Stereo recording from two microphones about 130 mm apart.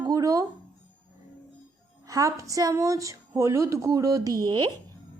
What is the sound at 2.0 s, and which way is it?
A woman's voice, 25° right (ahead or behind).